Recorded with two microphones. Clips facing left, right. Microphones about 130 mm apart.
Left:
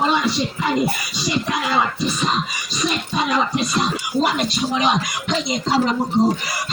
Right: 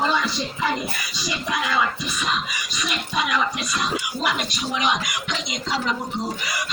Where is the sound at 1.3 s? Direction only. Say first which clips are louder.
Left 4 dB; 30° left (ahead or behind).